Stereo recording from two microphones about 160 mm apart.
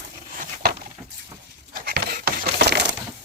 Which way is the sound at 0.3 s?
75° right (ahead or behind).